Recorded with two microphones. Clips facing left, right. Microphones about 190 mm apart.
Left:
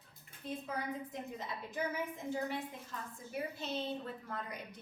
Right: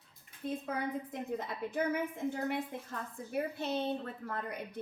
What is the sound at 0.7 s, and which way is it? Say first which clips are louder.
A woman's voice: right 4 dB; 60° right (ahead or behind).